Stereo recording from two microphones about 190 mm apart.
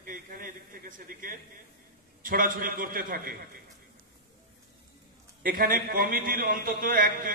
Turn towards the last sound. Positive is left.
turn(degrees=-50)  # may be behind; listen again after turning